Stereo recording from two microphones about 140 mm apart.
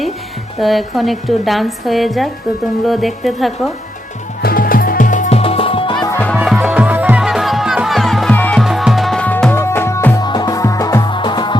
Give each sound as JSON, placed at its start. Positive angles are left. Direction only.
{"t": 0.6, "sound": "a woman's voice", "side_deg": 0}
{"t": 4.4, "sound": "music", "side_deg": 90}
{"t": 5.4, "sound": "music", "side_deg": 40}
{"t": 6.1, "sound": "music", "side_deg": 10}
{"t": 6.4, "sound": "music", "side_deg": -5}
{"t": 10.2, "sound": "music", "side_deg": 30}